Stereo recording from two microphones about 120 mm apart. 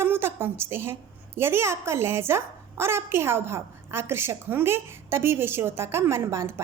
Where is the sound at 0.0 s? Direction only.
20° right (ahead or behind).